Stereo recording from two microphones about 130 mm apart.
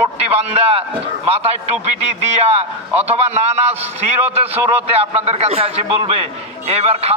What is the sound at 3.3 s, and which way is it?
A man's voice, 55° right (ahead or behind).